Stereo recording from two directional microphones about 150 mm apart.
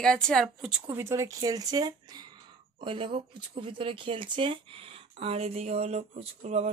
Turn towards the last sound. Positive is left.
turn(degrees=-45)  # may be behind; listen again after turning